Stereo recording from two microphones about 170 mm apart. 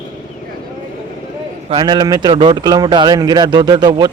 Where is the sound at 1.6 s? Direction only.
30° right (ahead or behind).